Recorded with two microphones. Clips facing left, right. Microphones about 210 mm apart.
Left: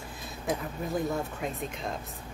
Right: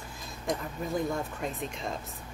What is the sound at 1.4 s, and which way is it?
Speech, centre (ahead or behind).